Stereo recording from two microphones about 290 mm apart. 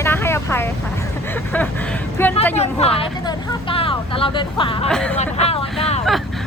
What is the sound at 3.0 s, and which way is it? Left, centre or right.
Vehicle, centre.